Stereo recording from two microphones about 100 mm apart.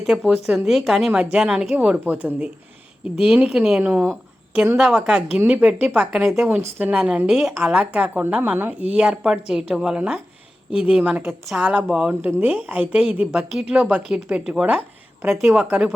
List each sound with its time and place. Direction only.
0.0 s speech: 5° right (ahead or behind)
6.7 s speech: 15° right (ahead or behind)
7.3 s a woman's voice: 5° right (ahead or behind)
9.0 s speech: 10° right (ahead or behind)